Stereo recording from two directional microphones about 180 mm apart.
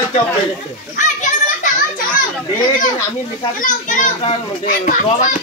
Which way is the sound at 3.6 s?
45° left (ahead or behind).